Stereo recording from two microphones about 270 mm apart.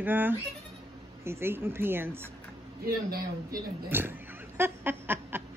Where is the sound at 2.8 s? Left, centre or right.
Right.